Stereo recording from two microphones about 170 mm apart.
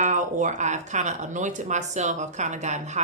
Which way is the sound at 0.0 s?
45° right (ahead or behind).